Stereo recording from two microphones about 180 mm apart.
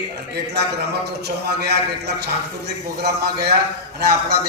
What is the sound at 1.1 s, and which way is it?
Speech, 65° right (ahead or behind).